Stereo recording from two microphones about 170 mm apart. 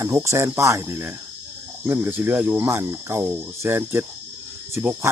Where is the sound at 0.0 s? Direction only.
20° right (ahead or behind).